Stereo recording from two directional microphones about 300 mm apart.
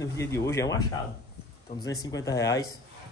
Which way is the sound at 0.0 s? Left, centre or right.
Centre.